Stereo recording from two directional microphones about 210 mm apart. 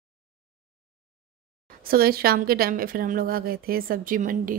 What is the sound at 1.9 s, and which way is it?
A woman's voice, 45° right (ahead or behind).